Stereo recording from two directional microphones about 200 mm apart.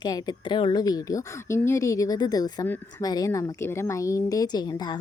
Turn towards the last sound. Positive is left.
turn(degrees=20)  # may be behind; listen again after turning